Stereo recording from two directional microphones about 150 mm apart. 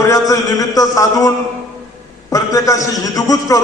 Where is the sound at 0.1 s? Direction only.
25° left (ahead or behind).